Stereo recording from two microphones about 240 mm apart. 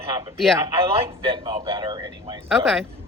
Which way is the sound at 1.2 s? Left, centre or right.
Centre.